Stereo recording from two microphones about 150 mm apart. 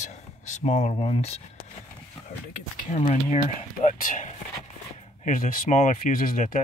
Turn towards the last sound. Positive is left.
turn(degrees=60)  # may be behind; listen again after turning